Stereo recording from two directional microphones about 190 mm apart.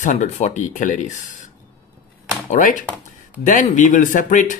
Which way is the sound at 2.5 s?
40° left (ahead or behind).